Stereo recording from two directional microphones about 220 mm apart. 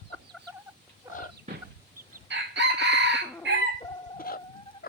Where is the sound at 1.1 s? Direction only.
10° right (ahead or behind).